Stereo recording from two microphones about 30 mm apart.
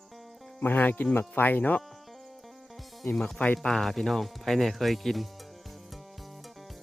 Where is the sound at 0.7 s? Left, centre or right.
Left.